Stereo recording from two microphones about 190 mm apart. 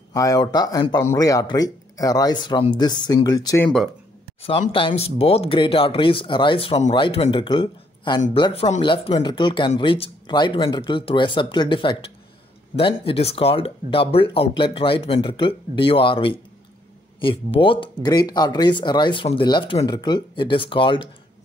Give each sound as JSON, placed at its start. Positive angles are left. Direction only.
{"t": 0.1, "sound": "speech", "side_deg": 20}
{"t": 4.4, "sound": "speech", "side_deg": 30}